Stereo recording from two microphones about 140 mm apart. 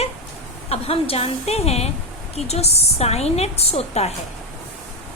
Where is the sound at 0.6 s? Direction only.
45° left (ahead or behind).